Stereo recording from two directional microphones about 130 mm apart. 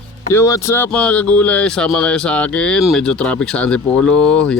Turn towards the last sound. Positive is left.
turn(degrees=10)  # may be behind; listen again after turning